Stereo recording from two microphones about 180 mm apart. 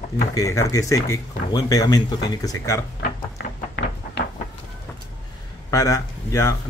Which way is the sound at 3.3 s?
65° left (ahead or behind).